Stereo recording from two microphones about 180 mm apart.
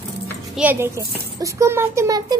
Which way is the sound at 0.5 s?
10° right (ahead or behind).